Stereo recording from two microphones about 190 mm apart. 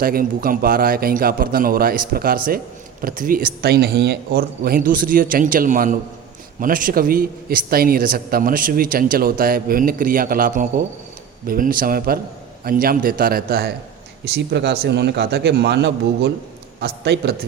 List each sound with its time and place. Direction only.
0.0 s a man's voice: 50° right (ahead or behind)